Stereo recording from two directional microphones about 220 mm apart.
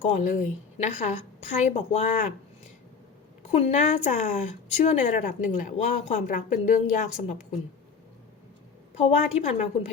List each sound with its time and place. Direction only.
0.0 s a woman's voice: 35° left (ahead or behind)
3.4 s a woman's voice: 30° left (ahead or behind)
9.0 s a woman's voice: 30° left (ahead or behind)